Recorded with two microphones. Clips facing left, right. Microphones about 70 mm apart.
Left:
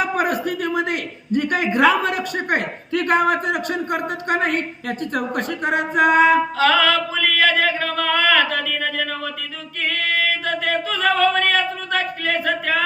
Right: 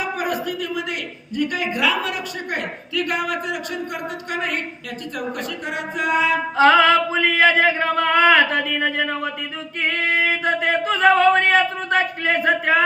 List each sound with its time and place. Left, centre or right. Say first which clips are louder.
0.0 s a man's voice: left 3 dB; left
6.6 s singing: right 3 dB; right